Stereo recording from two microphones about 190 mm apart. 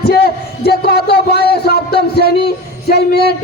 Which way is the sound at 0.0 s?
55° left (ahead or behind).